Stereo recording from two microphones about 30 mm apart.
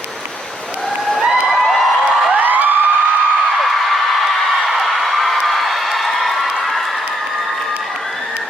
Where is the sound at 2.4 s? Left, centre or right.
Right.